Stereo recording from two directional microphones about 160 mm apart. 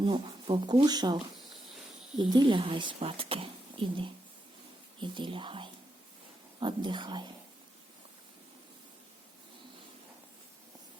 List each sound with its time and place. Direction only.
0.0 s speech: 30° right (ahead or behind)